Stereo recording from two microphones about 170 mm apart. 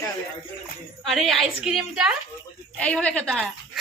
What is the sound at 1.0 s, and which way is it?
A woman's voice, centre (ahead or behind).